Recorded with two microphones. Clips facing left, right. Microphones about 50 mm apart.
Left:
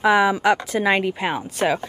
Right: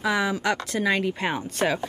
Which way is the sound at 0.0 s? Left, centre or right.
Centre.